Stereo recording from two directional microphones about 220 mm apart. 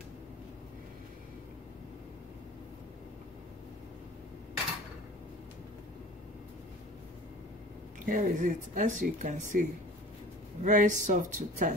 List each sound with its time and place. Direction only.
8.0 s speech: 35° right (ahead or behind)